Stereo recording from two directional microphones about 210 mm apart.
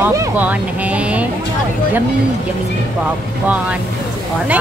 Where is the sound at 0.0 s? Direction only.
10° right (ahead or behind).